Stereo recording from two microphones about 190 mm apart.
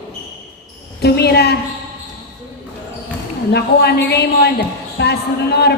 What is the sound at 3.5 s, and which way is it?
A man's voice, 60° left (ahead or behind).